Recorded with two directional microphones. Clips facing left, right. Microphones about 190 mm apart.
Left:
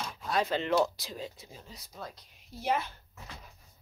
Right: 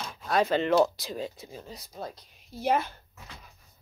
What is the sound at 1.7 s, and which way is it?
Speech, 35° right (ahead or behind).